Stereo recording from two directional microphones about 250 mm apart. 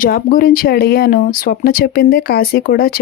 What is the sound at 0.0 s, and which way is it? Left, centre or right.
Speech, left.